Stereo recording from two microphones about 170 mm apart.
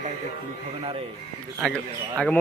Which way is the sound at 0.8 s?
30° right (ahead or behind).